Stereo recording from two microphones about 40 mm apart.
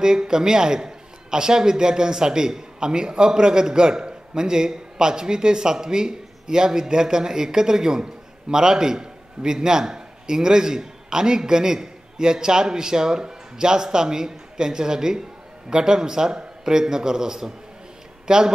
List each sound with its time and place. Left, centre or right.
0.0 s a man's voice: centre